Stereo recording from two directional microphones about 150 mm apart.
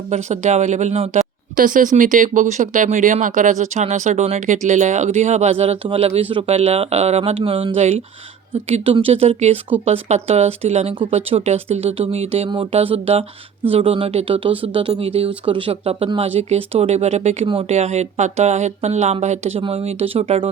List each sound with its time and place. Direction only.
0.1 s speech: 50° right (ahead or behind)
1.5 s speech: 65° right (ahead or behind); by 20.5 s 40° right (ahead or behind)